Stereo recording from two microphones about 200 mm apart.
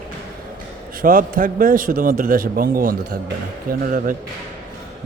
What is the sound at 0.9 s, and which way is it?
A man's voice, 45° right (ahead or behind).